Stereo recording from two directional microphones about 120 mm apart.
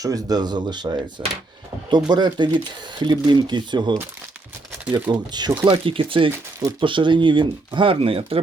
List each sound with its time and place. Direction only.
0.0 s speech: 30° right (ahead or behind)
5.1 s speech: 35° right (ahead or behind)
5.6 s speech: 50° right (ahead or behind)
6.3 s speech: 20° right (ahead or behind)
6.7 s speech: 45° right (ahead or behind)